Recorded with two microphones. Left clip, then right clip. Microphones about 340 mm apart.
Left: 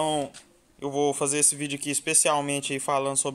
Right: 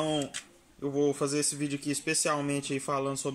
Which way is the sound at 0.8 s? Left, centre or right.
Centre.